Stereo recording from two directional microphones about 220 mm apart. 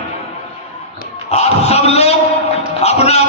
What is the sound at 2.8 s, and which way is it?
Music, 30° left (ahead or behind).